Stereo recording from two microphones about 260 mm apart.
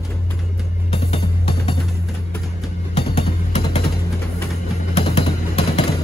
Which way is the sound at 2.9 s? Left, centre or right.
Left.